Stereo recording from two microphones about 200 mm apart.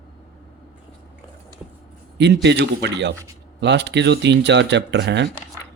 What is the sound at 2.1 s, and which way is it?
A man's voice, 60° right (ahead or behind).